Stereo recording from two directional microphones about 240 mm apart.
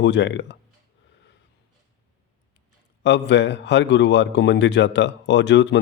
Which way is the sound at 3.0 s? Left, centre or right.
Left.